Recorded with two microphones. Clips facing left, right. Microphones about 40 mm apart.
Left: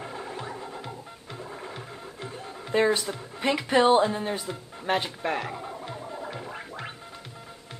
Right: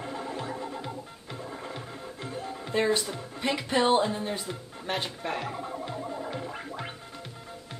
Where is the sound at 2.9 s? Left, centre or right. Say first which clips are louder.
Left 1 dB; centre.